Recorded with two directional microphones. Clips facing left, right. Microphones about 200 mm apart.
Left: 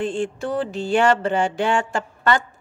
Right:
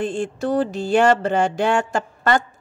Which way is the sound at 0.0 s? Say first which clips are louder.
Right 1 dB; 40° right (ahead or behind).